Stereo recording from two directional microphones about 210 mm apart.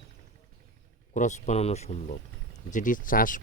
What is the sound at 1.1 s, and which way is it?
Speech, 35° left (ahead or behind).